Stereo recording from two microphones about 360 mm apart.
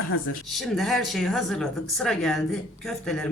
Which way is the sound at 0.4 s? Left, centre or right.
Centre.